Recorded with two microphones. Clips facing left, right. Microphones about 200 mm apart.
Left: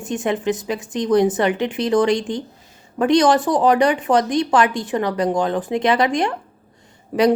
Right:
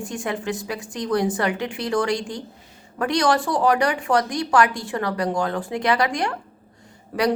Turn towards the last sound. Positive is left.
turn(degrees=15)  # may be behind; listen again after turning